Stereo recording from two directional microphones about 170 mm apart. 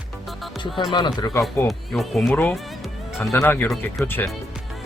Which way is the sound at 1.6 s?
Centre (ahead or behind).